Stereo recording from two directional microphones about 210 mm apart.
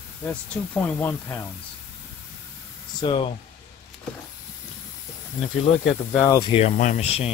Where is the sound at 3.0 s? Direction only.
25° left (ahead or behind).